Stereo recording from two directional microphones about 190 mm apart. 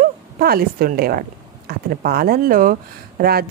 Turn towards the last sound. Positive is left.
turn(degrees=-50)  # may be behind; listen again after turning